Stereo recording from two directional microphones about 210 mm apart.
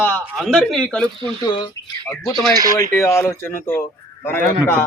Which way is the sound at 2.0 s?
10° left (ahead or behind).